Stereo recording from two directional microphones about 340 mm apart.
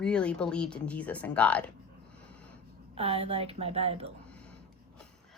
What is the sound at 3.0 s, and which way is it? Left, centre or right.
A woman's voice, centre.